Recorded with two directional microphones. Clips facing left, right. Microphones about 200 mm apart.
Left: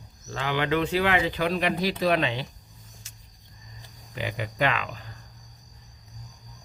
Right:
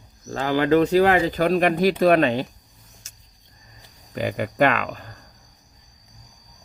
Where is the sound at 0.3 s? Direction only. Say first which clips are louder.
Right 7 dB; 40° right (ahead or behind).